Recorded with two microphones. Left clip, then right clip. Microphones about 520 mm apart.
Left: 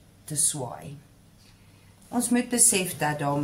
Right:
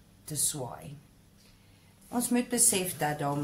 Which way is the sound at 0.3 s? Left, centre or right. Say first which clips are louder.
Left 4 dB; right.